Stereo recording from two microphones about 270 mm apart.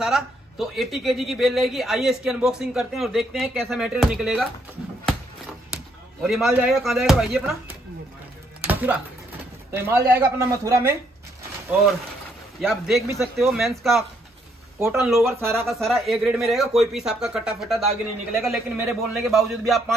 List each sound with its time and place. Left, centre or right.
0.0 s a man's voice: centre
6.2 s a man's voice: centre
8.5 s music: centre
9.7 s speech: centre
12.5 s a man's voice: centre
15.5 s a man's voice: centre